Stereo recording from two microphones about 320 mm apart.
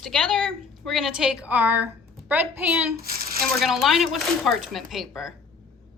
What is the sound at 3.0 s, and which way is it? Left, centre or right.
Speech, right.